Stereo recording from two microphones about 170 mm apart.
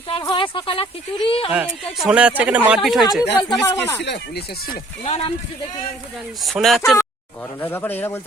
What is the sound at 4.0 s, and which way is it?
Speech, 85° left.